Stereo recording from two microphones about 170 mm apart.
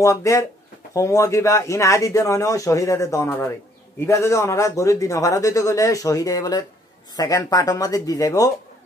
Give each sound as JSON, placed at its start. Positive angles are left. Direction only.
{"t": 0.0, "sound": "a man's voice", "side_deg": 20}